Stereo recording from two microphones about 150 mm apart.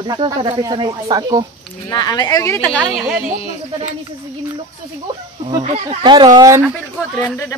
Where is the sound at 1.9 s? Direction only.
25° left (ahead or behind); by 3.1 s 5° left (ahead or behind).